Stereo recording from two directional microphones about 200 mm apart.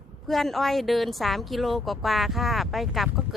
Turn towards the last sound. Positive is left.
turn(degrees=0)  # may be behind; listen again after turning